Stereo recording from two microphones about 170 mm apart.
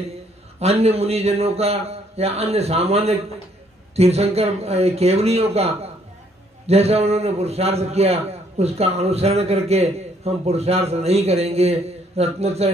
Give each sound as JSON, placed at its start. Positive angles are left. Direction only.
{"t": 0.6, "sound": "a man's voice", "side_deg": -35}